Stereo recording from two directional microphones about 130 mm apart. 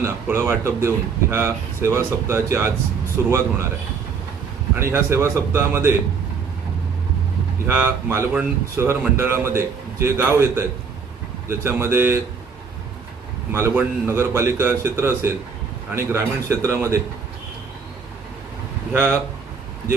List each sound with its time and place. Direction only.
0.0 s speech: 20° right (ahead or behind)
4.8 s speech: 20° right (ahead or behind)
7.7 s speech: 15° right (ahead or behind)
13.5 s speech: 20° right (ahead or behind)
18.9 s speech: 15° right (ahead or behind)